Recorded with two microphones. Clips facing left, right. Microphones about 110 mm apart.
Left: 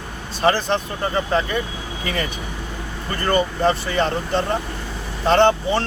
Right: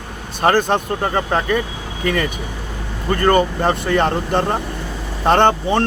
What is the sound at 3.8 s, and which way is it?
Speech, 55° right (ahead or behind).